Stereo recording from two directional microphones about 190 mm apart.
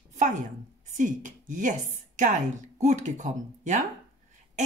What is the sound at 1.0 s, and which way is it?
Speech, 45° right (ahead or behind).